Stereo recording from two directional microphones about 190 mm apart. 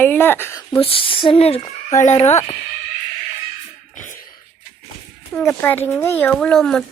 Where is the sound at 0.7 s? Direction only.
30° left (ahead or behind).